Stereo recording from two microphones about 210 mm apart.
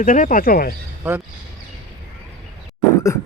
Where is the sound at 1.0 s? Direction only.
10° right (ahead or behind).